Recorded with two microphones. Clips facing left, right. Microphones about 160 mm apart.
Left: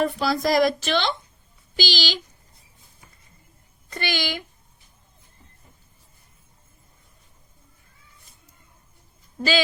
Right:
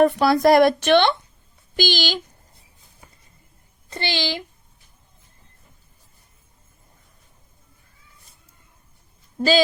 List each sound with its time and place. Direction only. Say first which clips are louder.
0.0 s speech: right 7 dB; 60° right (ahead or behind)
3.8 s a child's voice: right 2 dB; 25° right (ahead or behind)